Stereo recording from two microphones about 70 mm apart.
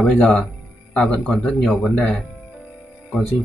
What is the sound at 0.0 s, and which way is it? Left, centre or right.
Speech, centre.